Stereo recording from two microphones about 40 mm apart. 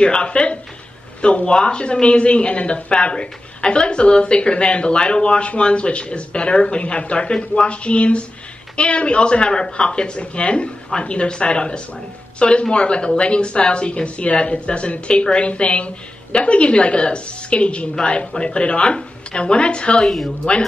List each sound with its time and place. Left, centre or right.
0.0 s speech: left
20.0 s speech: centre